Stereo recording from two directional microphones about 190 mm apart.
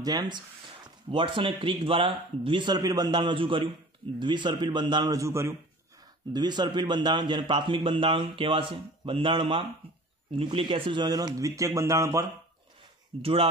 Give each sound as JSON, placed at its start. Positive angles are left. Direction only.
{"t": 0.0, "sound": "a man's voice", "side_deg": -20}
{"t": 13.2, "sound": "a man's voice", "side_deg": -30}